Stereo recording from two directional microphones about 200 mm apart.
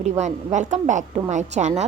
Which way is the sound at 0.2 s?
35° right (ahead or behind).